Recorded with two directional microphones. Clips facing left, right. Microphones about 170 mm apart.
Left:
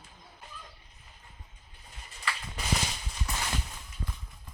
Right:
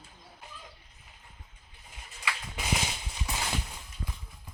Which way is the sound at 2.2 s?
10° right (ahead or behind).